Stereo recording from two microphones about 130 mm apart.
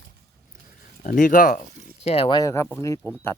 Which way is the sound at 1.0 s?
90° left.